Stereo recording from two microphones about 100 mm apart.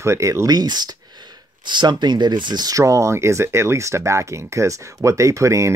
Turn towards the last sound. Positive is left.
turn(degrees=-30)  # may be behind; listen again after turning